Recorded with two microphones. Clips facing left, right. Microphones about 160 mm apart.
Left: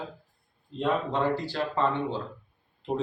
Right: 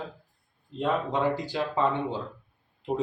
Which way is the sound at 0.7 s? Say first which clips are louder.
Even; 10° right (ahead or behind).